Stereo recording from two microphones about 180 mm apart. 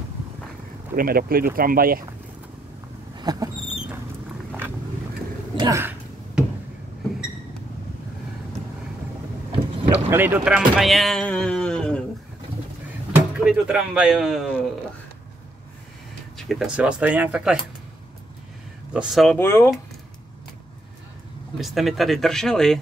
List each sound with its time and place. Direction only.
0.9 s speech: 55° right (ahead or behind)
3.2 s dog: 20° right (ahead or behind)
5.6 s a sound: 15° right (ahead or behind)
10.0 s speech: 10° right (ahead or behind); by 12.0 s 5° left (ahead or behind)
13.1 s speech: 5° right (ahead or behind)
16.3 s speech: centre (ahead or behind)
18.9 s speech: centre (ahead or behind)
19.3 s speech: 15° left (ahead or behind)
21.5 s speech: centre (ahead or behind)